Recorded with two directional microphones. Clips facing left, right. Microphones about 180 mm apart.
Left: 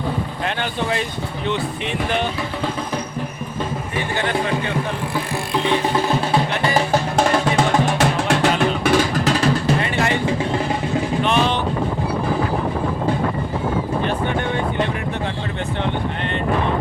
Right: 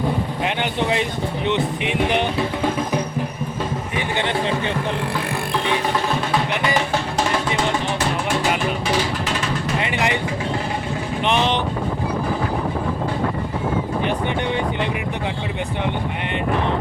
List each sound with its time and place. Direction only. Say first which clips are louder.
0.4 s speech: right 1 dB; 20° right (ahead or behind)
1.5 s music: right 1 dB; 15° right (ahead or behind)
3.9 s speech: left 1 dB; 20° right (ahead or behind)
7.9 s music: left 4 dB; 80° left
9.1 s music: left 6 dB; 40° left (ahead or behind)
9.8 s music: left 1 dB; 15° right (ahead or behind)
11.2 s boat: right 1 dB; 20° right (ahead or behind)
14.3 s music: left 1 dB; 15° right (ahead or behind)